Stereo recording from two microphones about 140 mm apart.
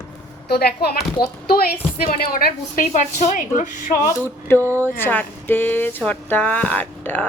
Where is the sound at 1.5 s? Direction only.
90° left.